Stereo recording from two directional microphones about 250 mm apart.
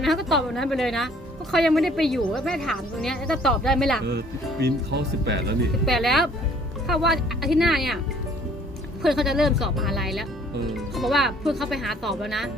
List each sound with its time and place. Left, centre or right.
0.0 s a woman's voice: centre
4.6 s speech: right
5.8 s a woman's voice: centre
9.0 s a woman's voice: centre